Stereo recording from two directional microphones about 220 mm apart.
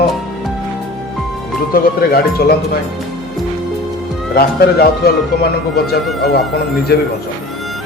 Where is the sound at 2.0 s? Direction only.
45° left (ahead or behind).